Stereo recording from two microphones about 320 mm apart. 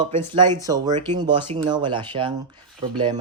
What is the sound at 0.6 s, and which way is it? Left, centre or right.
Speech, centre.